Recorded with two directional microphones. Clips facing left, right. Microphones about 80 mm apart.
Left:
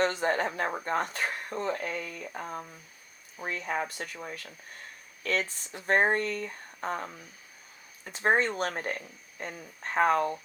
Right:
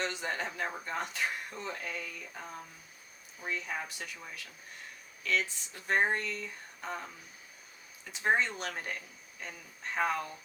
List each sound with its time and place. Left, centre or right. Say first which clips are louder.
0.0 s speech: left 8 dB; left